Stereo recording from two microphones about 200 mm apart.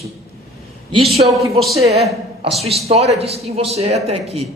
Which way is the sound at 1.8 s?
30° right (ahead or behind).